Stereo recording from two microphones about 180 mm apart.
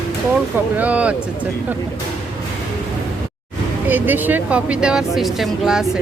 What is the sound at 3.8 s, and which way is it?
Speech, 10° right (ahead or behind).